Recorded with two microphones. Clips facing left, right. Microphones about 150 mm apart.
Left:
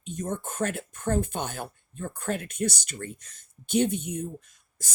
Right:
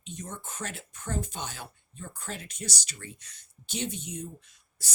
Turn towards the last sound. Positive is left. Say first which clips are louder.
# left 3 dB
turn(degrees=50)  # may be behind; listen again after turning